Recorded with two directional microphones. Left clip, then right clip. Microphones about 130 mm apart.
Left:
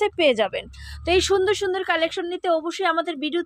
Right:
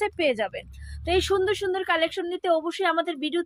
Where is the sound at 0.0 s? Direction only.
35° left (ahead or behind).